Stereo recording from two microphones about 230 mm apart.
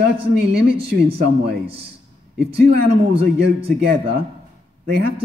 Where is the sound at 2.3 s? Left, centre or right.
Right.